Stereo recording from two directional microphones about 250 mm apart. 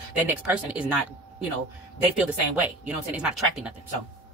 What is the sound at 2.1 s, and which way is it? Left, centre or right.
Speech, centre.